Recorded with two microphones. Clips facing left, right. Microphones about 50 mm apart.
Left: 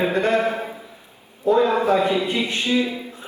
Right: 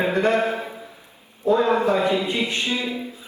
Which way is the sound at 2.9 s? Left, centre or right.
Left.